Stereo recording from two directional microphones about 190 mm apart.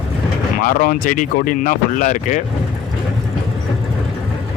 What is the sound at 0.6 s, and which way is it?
Speech, 45° left (ahead or behind).